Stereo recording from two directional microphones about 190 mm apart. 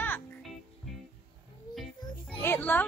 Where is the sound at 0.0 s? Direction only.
10° left (ahead or behind).